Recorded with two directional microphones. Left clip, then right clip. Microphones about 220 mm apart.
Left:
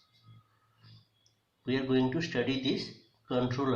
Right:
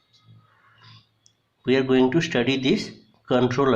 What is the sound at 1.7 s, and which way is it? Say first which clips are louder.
Speech: right 11 dB; 50° right (ahead or behind).